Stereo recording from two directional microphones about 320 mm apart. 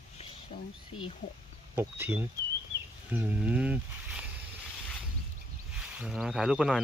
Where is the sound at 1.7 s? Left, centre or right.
Centre.